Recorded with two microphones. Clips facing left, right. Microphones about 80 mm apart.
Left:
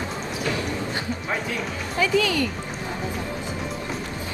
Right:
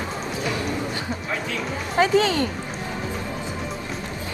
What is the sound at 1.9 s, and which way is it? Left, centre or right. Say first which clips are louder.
Speech: right 3 dB; right.